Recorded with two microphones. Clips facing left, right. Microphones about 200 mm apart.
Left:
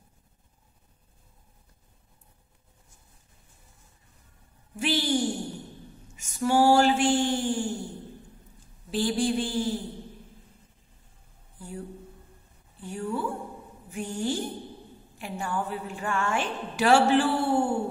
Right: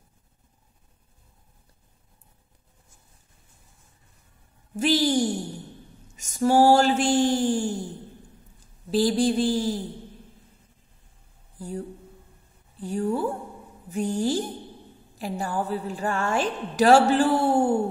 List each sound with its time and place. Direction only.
4.7 s a woman's voice: 40° right (ahead or behind)
8.9 s a woman's voice: 40° right (ahead or behind)
11.5 s a sound: 40° right (ahead or behind)
12.7 s a woman's voice: 40° right (ahead or behind)